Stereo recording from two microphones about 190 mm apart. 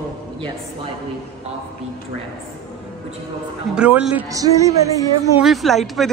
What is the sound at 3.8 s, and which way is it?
Speech, 5° right (ahead or behind).